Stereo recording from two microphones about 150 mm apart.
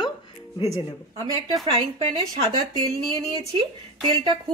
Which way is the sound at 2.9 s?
35° right (ahead or behind).